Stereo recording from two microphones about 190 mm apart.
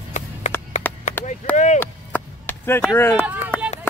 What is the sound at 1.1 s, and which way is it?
Chop, 40° left (ahead or behind).